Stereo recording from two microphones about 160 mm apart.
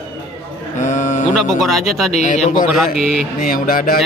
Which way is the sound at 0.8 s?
50° left (ahead or behind).